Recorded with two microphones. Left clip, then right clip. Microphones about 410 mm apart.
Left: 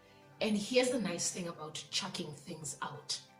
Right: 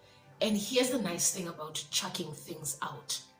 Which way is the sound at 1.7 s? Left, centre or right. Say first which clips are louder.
Right 5 dB; left.